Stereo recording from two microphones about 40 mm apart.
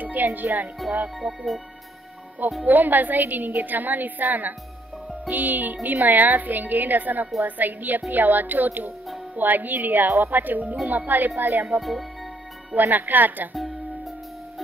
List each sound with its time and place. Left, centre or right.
0.0 s speech: right
1.2 s speech: centre
2.6 s a woman's voice: right
11.8 s speech: centre
12.9 s a woman's voice: right